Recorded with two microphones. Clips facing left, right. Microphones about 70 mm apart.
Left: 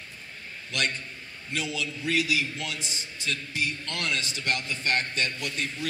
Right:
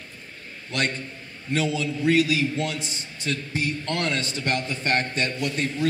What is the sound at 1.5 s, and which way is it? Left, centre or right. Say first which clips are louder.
A man's voice: right 7 dB; right.